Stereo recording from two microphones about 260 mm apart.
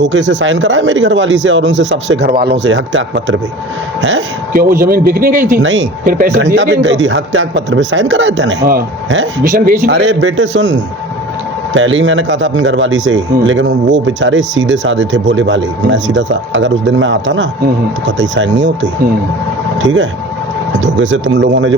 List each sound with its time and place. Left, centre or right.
0.0 s a man's voice: right
5.8 s a man's voice: right
9.4 s a man's voice: right
19.8 s a man's voice: right